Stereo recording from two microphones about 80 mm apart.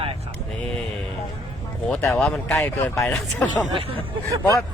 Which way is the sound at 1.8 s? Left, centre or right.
Centre.